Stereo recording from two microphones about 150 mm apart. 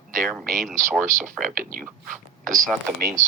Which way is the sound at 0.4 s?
65° right (ahead or behind).